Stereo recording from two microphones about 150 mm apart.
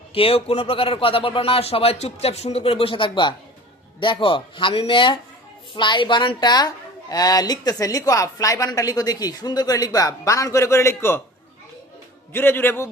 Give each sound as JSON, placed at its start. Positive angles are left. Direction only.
{"t": 0.1, "sound": "a woman's voice", "side_deg": 40}
{"t": 12.3, "sound": "a man's voice", "side_deg": 15}